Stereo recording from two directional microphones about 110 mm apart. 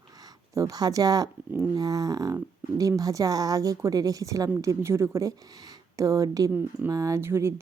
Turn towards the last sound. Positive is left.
turn(degrees=-25)  # may be behind; listen again after turning